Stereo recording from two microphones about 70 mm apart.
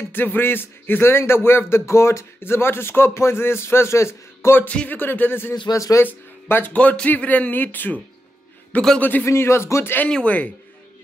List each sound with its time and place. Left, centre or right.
0.1 s speech: left
4.6 s speech: left
5.7 s speech: left
6.0 s speech: left
6.7 s speech: centre
9.0 s speech: left
9.3 s speech: left
10.0 s speech: centre